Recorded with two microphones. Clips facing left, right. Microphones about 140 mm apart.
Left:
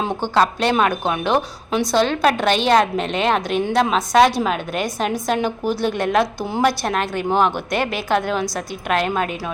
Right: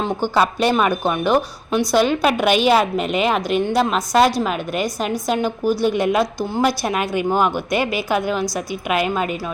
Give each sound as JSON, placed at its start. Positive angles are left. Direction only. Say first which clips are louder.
{"t": 0.3, "sound": "a woman's voice", "louder": "even", "side_deg": -5}